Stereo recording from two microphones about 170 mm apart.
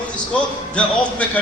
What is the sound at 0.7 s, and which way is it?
Speech, 5° left (ahead or behind).